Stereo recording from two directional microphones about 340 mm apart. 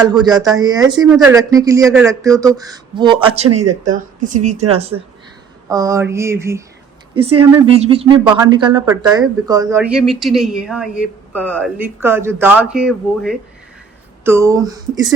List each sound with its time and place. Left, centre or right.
0.0 s a woman's voice: centre